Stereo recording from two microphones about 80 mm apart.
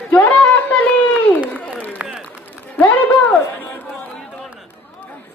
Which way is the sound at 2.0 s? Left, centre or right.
Centre.